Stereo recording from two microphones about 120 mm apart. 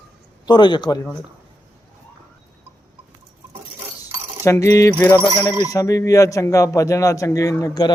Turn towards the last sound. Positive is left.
turn(degrees=30)  # may be behind; listen again after turning